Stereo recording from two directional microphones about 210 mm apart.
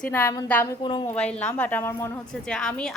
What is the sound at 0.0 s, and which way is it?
A woman's voice, 10° left (ahead or behind).